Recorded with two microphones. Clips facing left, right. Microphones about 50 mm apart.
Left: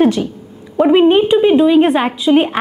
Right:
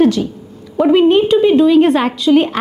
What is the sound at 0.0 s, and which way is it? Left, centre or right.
A woman's voice, left.